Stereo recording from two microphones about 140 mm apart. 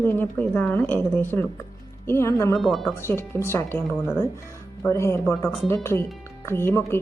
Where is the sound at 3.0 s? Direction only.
15° left (ahead or behind).